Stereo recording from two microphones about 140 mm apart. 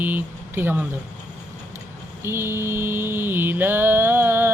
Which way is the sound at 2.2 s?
15° right (ahead or behind).